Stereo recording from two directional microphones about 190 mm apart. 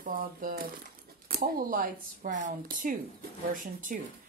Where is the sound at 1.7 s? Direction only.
45° right (ahead or behind).